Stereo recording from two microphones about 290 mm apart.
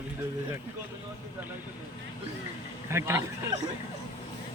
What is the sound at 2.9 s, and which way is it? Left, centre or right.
Speech, centre.